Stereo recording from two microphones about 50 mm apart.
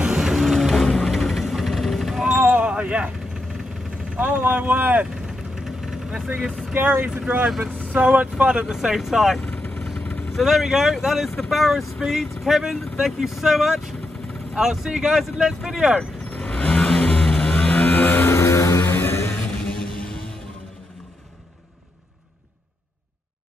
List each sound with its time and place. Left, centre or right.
0.0 s vehicle: centre
2.4 s a sound: right
4.2 s speech: right
5.1 s vehicle: centre
6.7 s speech: right
7.4 s speech: centre
7.9 s speech: right; by 9.4 s centre
9.9 s vehicle: left
10.3 s speech: centre
16.0 s vehicle: left
18.3 s music: left
18.8 s a sound: left
19.3 s music: centre